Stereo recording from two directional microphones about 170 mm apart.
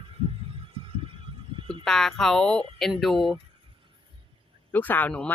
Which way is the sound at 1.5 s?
30° right (ahead or behind).